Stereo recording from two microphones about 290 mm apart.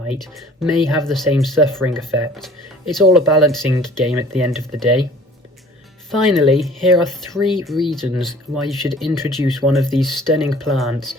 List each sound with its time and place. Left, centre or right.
0.1 s speech: centre
6.1 s speech: centre